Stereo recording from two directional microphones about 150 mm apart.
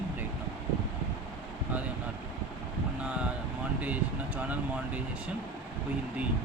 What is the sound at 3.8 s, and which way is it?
Speech, 10° right (ahead or behind).